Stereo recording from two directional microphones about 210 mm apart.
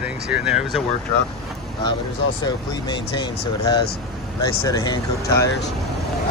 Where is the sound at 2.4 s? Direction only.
20° left (ahead or behind).